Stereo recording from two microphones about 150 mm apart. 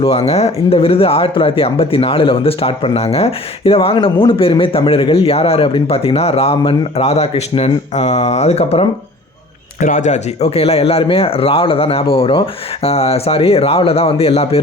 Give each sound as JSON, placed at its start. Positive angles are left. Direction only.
{"t": 0.0, "sound": "speech", "side_deg": 45}
{"t": 9.8, "sound": "speech", "side_deg": 55}